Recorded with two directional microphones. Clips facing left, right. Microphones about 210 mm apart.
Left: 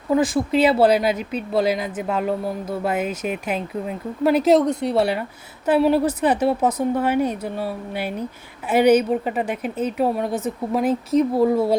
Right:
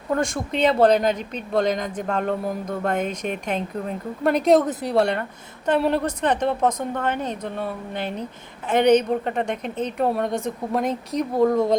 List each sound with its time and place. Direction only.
0.1 s a woman's voice: 5° left (ahead or behind)